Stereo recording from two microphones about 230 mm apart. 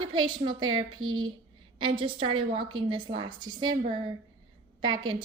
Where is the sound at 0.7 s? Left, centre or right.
Right.